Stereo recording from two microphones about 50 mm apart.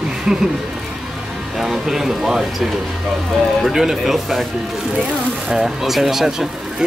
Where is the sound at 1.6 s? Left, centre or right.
Centre.